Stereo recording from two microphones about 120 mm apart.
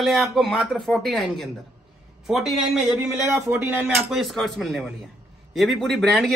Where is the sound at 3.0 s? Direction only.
20° right (ahead or behind).